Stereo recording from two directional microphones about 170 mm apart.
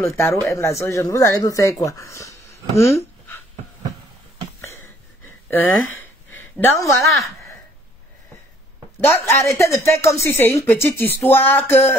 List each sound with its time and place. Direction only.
0.0 s a woman's voice: 15° left (ahead or behind)
6.3 s a woman's voice: 15° left (ahead or behind)
9.0 s a woman's voice: 15° left (ahead or behind)